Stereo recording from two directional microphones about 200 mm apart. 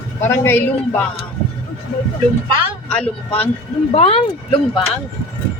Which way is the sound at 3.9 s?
30° left (ahead or behind).